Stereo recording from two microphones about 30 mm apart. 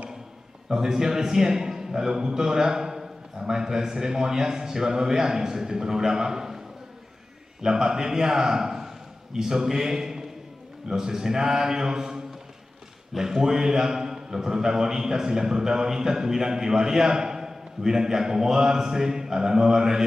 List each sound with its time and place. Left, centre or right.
0.7 s a man's voice: centre
7.6 s a man's voice: centre